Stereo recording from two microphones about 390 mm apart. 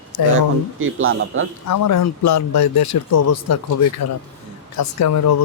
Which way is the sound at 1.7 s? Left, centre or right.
Left.